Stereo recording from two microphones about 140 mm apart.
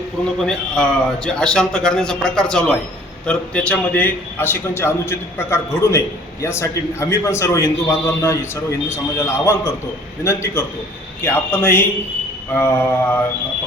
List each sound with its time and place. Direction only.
0.4 s a man's voice: 5° left (ahead or behind)